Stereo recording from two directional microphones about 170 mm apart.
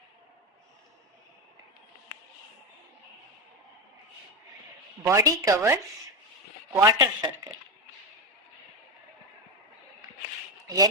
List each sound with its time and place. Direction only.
5.0 s speech: 20° right (ahead or behind)